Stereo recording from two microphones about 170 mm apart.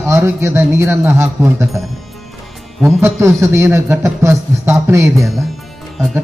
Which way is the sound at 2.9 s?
15° right (ahead or behind).